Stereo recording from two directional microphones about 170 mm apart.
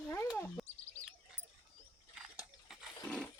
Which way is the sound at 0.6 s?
Centre (ahead or behind).